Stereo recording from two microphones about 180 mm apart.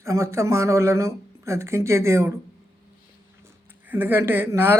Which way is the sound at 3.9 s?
10° right (ahead or behind).